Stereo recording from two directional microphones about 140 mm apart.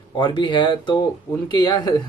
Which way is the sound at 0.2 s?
35° left (ahead or behind).